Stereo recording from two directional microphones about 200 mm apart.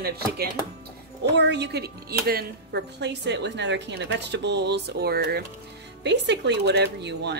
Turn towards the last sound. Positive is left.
turn(degrees=-60)  # may be behind; listen again after turning